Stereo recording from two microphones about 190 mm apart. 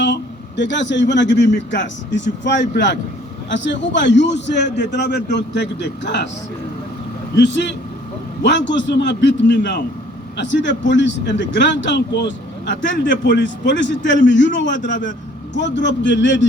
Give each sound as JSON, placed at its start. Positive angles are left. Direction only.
{"t": 0.0, "sound": "a man's voice", "side_deg": 70}
{"t": 7.3, "sound": "a man's voice", "side_deg": 70}